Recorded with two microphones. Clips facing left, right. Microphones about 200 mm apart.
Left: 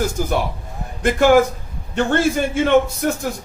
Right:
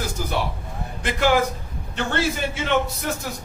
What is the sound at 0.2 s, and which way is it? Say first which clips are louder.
A man's voice: left 5 dB; 50° left (ahead or behind).